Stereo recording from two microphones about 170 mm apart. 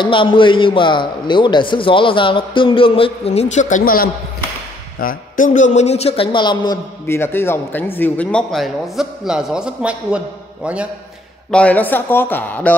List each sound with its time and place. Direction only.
0.0 s a man's voice: 30° left (ahead or behind)
7.1 s speech: 15° left (ahead or behind); by 10.9 s 5° right (ahead or behind)
11.5 s speech: 10° left (ahead or behind)